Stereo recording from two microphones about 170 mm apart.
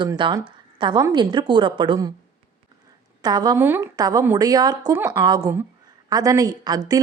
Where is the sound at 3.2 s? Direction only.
25° right (ahead or behind).